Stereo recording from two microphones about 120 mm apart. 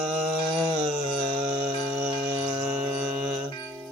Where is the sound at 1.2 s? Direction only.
45° right (ahead or behind).